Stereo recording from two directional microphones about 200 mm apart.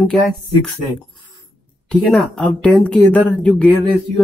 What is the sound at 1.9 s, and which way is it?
Speech, centre (ahead or behind).